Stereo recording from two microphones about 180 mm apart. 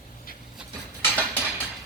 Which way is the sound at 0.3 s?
50° left (ahead or behind).